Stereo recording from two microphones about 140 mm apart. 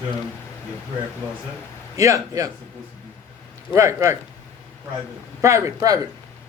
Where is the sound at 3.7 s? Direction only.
20° right (ahead or behind).